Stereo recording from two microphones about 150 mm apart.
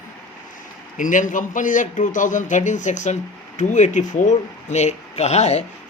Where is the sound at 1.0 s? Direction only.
60° left (ahead or behind).